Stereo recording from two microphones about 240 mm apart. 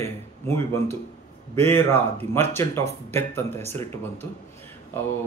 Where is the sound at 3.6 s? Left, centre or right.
Right.